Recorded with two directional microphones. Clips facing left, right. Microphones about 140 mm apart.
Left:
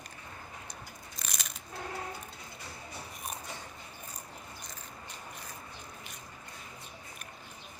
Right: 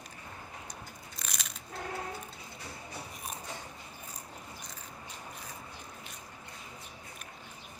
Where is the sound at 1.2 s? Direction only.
Centre (ahead or behind).